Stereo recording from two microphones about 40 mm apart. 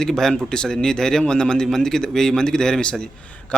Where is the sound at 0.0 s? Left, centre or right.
Centre.